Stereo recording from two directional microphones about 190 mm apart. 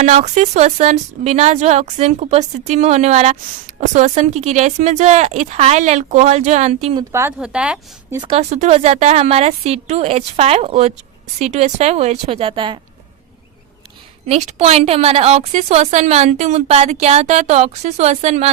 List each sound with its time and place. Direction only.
0.0 s speech: 35° right (ahead or behind)
6.9 s a woman's voice: 15° right (ahead or behind)
8.2 s speech: 30° right (ahead or behind)
14.3 s speech: 35° right (ahead or behind)